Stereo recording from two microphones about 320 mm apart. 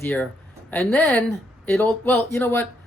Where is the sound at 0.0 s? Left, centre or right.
Centre.